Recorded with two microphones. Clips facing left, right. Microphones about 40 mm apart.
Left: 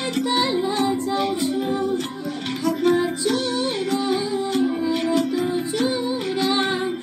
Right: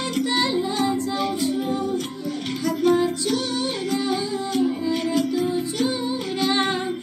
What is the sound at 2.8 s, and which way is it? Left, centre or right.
Music, centre.